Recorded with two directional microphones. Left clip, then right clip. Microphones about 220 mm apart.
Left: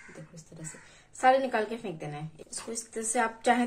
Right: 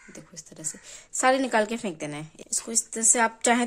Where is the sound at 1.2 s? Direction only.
55° right (ahead or behind).